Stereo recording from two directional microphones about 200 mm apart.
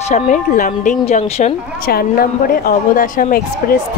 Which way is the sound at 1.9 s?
50° left (ahead or behind).